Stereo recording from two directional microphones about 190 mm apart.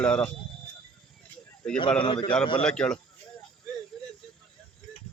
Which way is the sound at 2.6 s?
5° left (ahead or behind).